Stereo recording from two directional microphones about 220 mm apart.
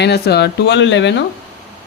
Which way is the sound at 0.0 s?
50° left (ahead or behind).